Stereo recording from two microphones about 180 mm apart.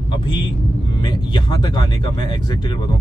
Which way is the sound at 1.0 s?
25° left (ahead or behind).